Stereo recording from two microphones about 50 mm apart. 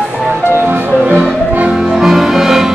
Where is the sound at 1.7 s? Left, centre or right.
Centre.